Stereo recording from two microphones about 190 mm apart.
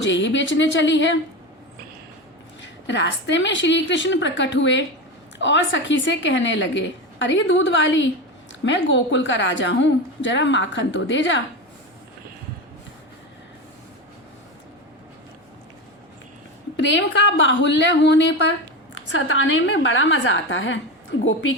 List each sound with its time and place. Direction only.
0.0 s a woman's voice: 75° left (ahead or behind)
2.6 s a woman's voice: 70° left (ahead or behind)
16.7 s a woman's voice: 75° left (ahead or behind)
18.9 s a woman's voice: 80° left